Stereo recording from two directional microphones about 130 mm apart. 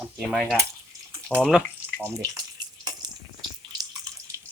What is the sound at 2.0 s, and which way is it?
Bathtub, 25° right (ahead or behind).